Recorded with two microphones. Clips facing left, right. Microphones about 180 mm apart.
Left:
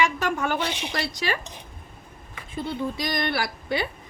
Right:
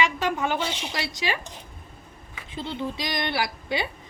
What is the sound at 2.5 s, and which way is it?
A woman's voice, 20° right (ahead or behind).